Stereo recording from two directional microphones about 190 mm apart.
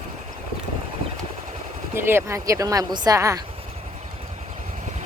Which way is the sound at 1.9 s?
10° right (ahead or behind).